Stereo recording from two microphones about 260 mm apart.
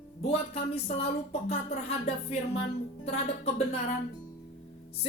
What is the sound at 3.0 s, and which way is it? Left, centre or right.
Speech, left.